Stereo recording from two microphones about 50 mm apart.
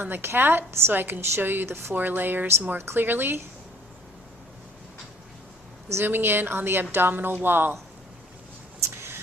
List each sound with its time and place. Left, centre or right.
0.0 s a woman's voice: right
2.7 s a woman's voice: right
6.1 s a woman's voice: right